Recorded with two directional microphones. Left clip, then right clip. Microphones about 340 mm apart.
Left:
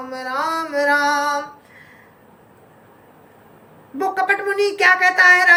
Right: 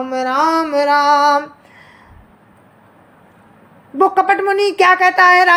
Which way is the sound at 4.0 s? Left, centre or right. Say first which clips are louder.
Right 6 dB; centre.